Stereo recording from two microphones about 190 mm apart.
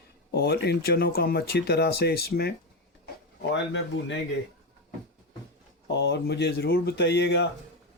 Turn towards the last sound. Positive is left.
turn(degrees=65)  # may be behind; listen again after turning